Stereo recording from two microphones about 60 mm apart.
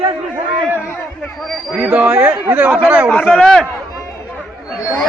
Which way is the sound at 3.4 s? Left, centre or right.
Centre.